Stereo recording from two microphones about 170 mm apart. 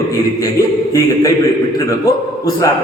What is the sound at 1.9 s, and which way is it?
Speech, 20° left (ahead or behind).